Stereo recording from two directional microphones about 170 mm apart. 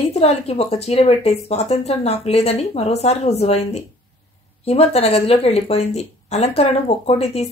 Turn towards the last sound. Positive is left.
turn(degrees=40)  # may be behind; listen again after turning